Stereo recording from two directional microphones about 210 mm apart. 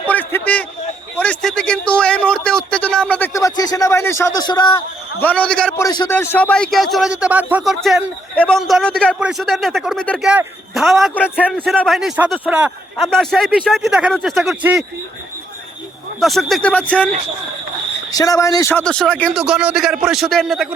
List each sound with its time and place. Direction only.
0.1 s a sound: 10° left (ahead or behind)
1.1 s speech: 5° left (ahead or behind)
5.2 s a man's voice: 5° left (ahead or behind)
5.8 s a man's voice: 15° left (ahead or behind); by 14.8 s 5° right (ahead or behind)
16.2 s a man's voice: centre (ahead or behind)
18.1 s a man's voice: 15° left (ahead or behind); by 20.7 s centre (ahead or behind)